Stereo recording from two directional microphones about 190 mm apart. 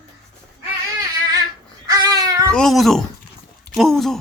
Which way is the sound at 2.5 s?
Centre (ahead or behind).